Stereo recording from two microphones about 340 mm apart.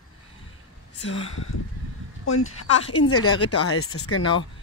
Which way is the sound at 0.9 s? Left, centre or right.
Left.